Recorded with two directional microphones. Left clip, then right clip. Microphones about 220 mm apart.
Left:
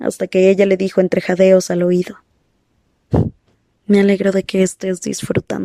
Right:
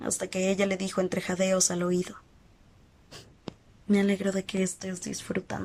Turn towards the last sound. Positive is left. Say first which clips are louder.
# left 13 dB
turn(degrees=45)  # may be behind; listen again after turning